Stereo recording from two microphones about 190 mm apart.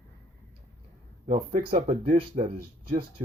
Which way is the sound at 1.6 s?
35° right (ahead or behind).